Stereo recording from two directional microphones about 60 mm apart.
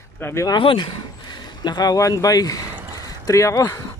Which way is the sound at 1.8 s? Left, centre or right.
Left.